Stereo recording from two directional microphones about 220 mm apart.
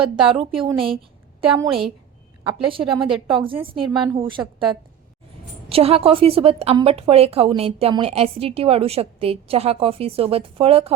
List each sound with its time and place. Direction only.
0.3 s a woman's voice: 25° right (ahead or behind)